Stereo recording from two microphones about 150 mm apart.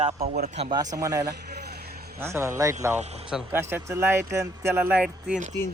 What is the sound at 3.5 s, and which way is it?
Speech, 15° right (ahead or behind).